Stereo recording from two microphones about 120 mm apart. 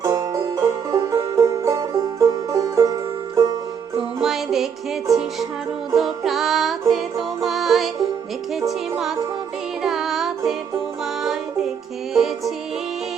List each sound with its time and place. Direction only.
0.0 s music: 30° right (ahead or behind)
4.2 s music: 5° right (ahead or behind)
5.9 s music: centre (ahead or behind)
12.1 s music: centre (ahead or behind)